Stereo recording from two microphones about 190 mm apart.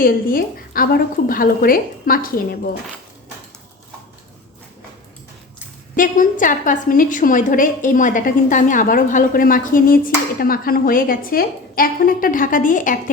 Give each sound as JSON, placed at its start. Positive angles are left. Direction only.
{"t": 0.0, "sound": "a woman's voice", "side_deg": 50}
{"t": 6.0, "sound": "a woman's voice", "side_deg": 45}